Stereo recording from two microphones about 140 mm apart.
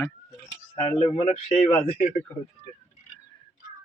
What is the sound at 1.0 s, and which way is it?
Speech, 45° left (ahead or behind).